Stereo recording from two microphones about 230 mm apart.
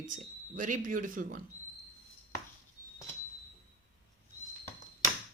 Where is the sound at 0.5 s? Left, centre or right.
Right.